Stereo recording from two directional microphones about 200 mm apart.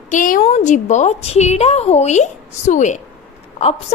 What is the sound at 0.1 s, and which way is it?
A woman's voice, 40° left (ahead or behind).